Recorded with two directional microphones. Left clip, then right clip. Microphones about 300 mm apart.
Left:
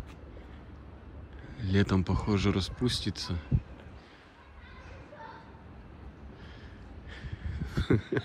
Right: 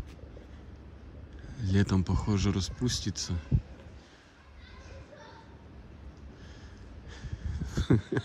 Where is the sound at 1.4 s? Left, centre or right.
Centre.